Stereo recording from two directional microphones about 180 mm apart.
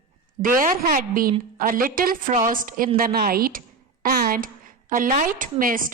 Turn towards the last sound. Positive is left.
turn(degrees=-50)  # may be behind; listen again after turning